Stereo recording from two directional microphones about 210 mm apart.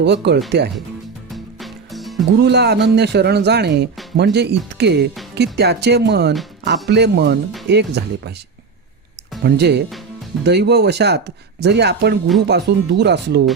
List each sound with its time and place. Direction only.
0.0 s speech: 55° right (ahead or behind)
1.3 s music: centre (ahead or behind)
2.4 s speech: 50° right (ahead or behind)
9.4 s speech: 50° right (ahead or behind)